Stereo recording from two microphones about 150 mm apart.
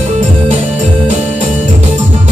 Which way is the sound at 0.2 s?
50° right (ahead or behind).